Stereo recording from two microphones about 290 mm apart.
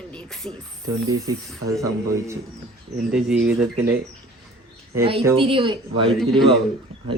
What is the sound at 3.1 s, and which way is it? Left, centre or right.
Speech, centre.